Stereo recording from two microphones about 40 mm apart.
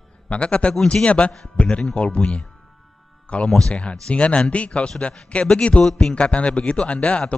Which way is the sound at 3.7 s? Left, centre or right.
Left.